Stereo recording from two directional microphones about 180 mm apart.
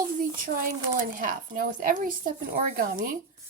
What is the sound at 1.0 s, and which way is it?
Speech, 50° right (ahead or behind).